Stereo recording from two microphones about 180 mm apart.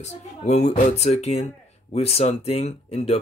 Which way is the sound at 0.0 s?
40° left (ahead or behind).